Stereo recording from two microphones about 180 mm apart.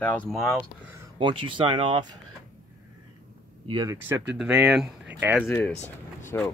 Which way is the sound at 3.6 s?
25° right (ahead or behind).